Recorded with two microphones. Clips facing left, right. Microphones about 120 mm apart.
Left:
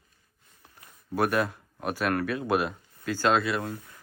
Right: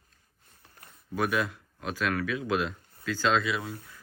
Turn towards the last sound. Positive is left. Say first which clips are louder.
# left 2 dB
turn(degrees=0)  # may be behind; listen again after turning